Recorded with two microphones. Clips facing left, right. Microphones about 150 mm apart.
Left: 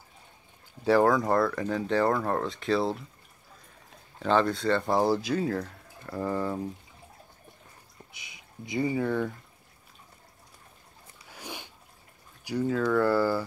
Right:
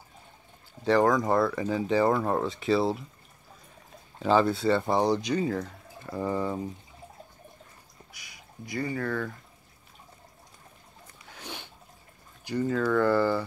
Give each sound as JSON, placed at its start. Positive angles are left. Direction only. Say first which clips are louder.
{"t": 0.8, "sound": "speech", "louder": "even", "side_deg": 5}
{"t": 4.2, "sound": "speech", "louder": "right 2 dB", "side_deg": -5}
{"t": 8.1, "sound": "speech", "louder": "right 1 dB", "side_deg": 20}
{"t": 11.2, "sound": "a sound", "louder": "left 1 dB", "side_deg": 10}
{"t": 12.4, "sound": "speech", "louder": "even", "side_deg": 5}